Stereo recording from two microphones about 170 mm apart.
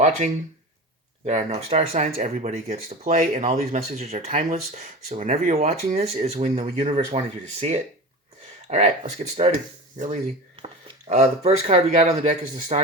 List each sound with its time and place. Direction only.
1.2 s speech: 40° right (ahead or behind)